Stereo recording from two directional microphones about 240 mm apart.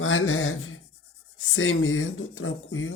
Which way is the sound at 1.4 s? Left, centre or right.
Left.